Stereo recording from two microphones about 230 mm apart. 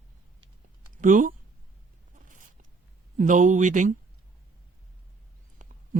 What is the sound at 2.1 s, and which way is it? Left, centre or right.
Zipper, right.